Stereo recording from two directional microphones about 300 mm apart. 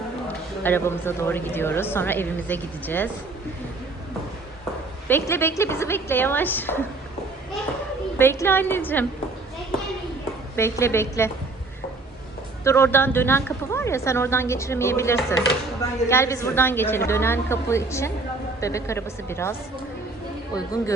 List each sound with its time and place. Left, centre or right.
0.6 s a woman's voice: centre
5.0 s a woman's voice: centre
8.2 s a woman's voice: centre
10.5 s a woman's voice: centre
12.6 s a woman's voice: centre